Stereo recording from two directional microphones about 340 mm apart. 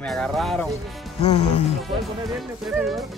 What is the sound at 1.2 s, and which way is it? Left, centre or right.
Music, centre.